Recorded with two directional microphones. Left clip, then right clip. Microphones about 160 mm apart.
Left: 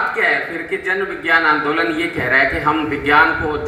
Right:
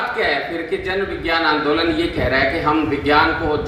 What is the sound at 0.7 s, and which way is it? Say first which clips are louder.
A man's voice: left 3 dB; 5° left (ahead or behind).